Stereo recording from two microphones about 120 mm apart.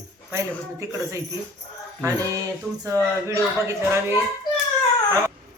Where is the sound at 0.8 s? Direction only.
25° right (ahead or behind).